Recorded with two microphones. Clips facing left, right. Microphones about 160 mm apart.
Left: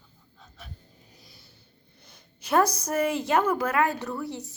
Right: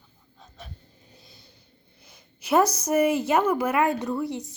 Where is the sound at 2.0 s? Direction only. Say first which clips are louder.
Right 1 dB; 10° right (ahead or behind).